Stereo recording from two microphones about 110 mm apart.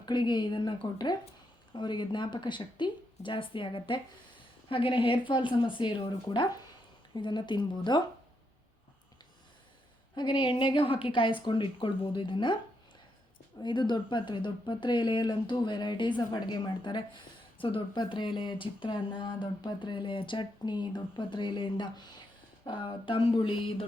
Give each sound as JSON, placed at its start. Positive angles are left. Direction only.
{"t": 0.0, "sound": "speech", "side_deg": 45}
{"t": 10.2, "sound": "speech", "side_deg": 45}
{"t": 13.6, "sound": "speech", "side_deg": 45}